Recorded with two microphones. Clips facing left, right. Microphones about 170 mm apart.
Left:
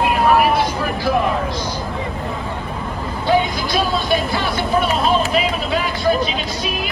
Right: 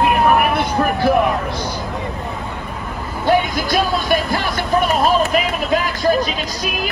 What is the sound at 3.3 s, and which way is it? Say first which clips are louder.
Music: right 1 dB; 50° right (ahead or behind).